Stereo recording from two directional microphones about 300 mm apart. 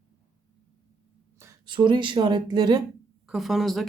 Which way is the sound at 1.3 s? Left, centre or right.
Centre.